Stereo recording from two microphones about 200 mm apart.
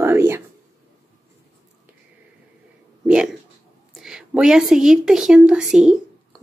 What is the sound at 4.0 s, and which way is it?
Speech, 5° right (ahead or behind).